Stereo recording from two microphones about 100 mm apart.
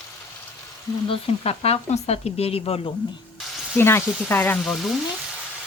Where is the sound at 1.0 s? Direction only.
75° left (ahead or behind).